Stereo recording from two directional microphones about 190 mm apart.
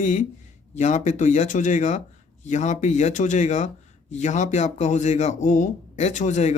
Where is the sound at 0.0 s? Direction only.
40° left (ahead or behind).